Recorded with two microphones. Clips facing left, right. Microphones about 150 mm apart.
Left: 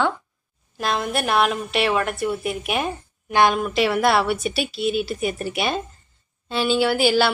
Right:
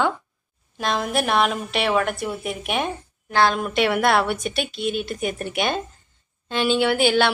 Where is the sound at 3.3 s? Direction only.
15° left (ahead or behind).